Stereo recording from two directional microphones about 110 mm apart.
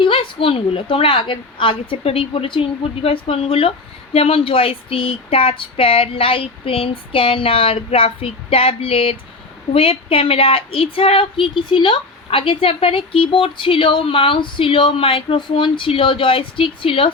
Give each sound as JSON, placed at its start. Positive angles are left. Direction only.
{"t": 0.0, "sound": "a woman's voice", "side_deg": 55}